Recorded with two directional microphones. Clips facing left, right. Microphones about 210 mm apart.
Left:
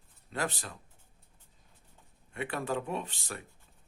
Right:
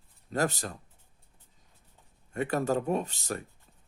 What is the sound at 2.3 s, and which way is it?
Speech, 40° right (ahead or behind).